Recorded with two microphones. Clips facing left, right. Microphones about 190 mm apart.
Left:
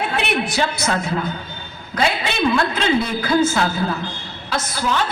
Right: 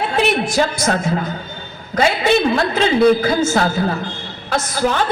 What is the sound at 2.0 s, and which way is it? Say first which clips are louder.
A man's voice: right 5 dB; 45° right (ahead or behind).